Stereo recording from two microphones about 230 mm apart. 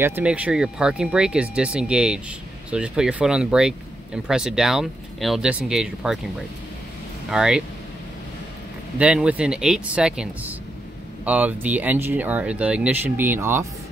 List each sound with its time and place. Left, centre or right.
0.0 s speech: centre
7.2 s speech: centre
8.9 s speech: centre